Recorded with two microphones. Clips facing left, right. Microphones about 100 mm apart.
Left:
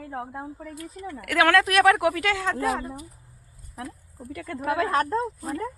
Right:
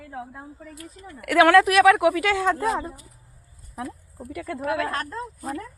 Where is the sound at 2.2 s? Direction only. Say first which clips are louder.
Right 3 dB; 15° right (ahead or behind).